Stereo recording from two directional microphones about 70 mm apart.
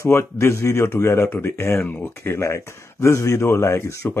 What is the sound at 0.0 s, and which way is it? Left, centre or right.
Speech, left.